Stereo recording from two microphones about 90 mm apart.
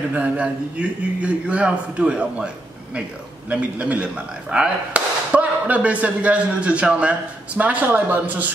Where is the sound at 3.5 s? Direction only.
15° right (ahead or behind).